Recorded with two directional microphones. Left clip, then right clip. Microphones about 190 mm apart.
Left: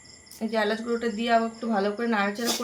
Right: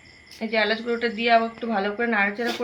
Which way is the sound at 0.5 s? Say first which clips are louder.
Right 3 dB; 10° left (ahead or behind).